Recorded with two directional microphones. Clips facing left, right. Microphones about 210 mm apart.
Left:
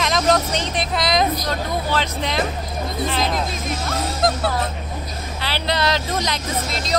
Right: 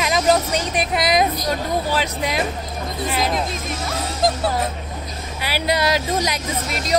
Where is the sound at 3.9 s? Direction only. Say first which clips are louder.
Even; centre (ahead or behind).